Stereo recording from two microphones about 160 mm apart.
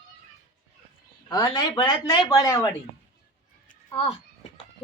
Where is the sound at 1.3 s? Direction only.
25° left (ahead or behind).